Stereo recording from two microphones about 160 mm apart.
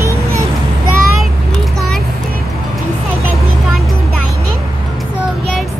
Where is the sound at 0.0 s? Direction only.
15° right (ahead or behind).